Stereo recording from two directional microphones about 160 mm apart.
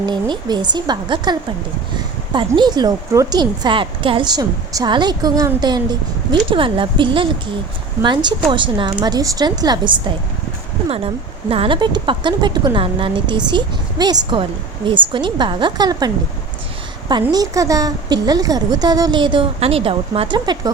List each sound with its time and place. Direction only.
0.0 s a woman's voice: 25° right (ahead or behind)
10.8 s a woman's voice: 35° right (ahead or behind)
17.3 s a woman's voice: 20° right (ahead or behind)